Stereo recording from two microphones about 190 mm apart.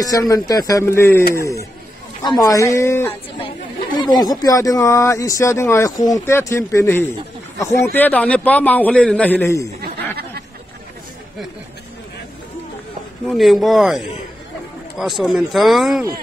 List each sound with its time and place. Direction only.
0.0 s speech: 20° left (ahead or behind)
13.3 s speech: centre (ahead or behind)